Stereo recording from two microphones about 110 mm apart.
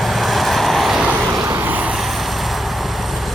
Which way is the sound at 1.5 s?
20° right (ahead or behind).